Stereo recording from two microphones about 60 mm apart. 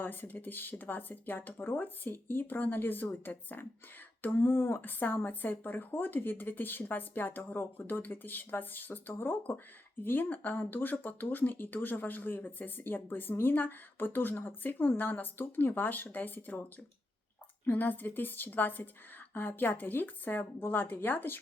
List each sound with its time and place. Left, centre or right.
0.0 s speech: left
17.7 s speech: left